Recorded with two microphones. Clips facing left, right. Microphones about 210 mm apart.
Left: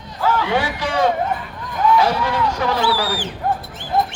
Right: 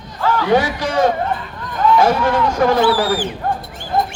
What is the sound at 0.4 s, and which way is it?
Speech, 40° right (ahead or behind).